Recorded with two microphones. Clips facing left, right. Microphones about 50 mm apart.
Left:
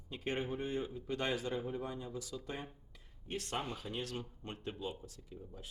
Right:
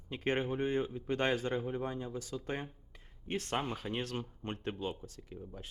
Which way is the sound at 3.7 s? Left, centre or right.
Right.